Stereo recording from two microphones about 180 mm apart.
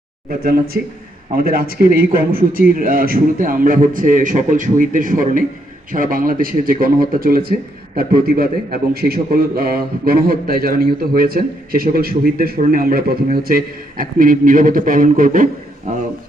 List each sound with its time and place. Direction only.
0.3 s a man's voice: 55° right (ahead or behind)